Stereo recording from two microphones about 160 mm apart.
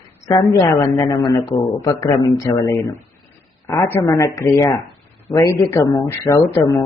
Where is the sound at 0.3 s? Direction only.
25° left (ahead or behind).